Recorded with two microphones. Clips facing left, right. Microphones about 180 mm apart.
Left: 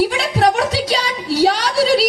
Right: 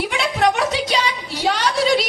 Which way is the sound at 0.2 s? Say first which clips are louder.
Left 3 dB; 35° left (ahead or behind).